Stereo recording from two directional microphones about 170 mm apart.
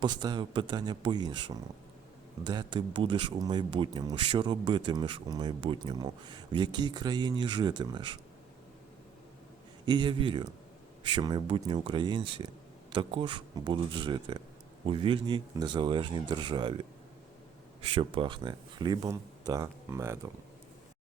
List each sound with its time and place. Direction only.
0.0 s speech: 25° right (ahead or behind)
9.8 s speech: 25° right (ahead or behind)
17.9 s speech: 30° right (ahead or behind); by 20.1 s 15° right (ahead or behind)